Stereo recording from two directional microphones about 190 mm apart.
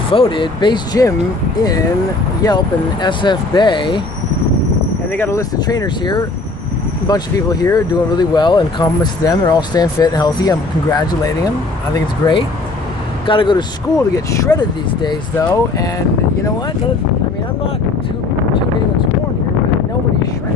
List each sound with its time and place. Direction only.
0.1 s speech: 25° left (ahead or behind)
2.4 s speech: 20° left (ahead or behind)
5.1 s speech: 15° left (ahead or behind)